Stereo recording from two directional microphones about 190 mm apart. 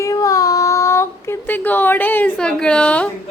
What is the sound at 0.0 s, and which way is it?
Child singing, 15° left (ahead or behind).